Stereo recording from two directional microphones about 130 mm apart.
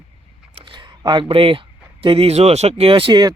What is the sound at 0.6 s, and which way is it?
Speech, 35° right (ahead or behind).